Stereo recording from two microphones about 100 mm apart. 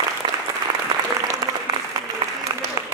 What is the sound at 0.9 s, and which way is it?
Applause, 45° right (ahead or behind).